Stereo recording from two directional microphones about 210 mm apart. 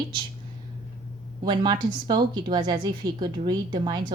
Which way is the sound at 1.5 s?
20° right (ahead or behind).